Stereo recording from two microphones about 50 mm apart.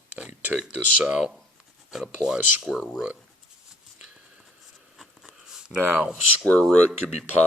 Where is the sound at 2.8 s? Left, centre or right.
Centre.